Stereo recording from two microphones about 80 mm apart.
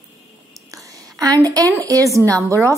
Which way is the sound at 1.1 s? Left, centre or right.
Right.